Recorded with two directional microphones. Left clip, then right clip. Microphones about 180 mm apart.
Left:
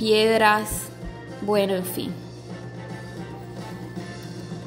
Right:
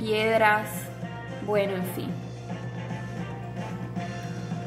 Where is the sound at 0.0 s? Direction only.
30° left (ahead or behind).